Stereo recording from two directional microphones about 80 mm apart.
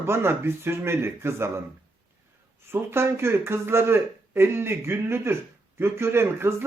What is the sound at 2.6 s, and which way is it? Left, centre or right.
Speech, right.